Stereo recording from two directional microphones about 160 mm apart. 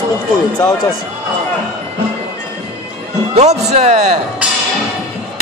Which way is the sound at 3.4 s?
45° right (ahead or behind).